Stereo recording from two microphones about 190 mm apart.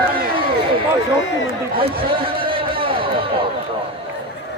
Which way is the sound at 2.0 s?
30° right (ahead or behind).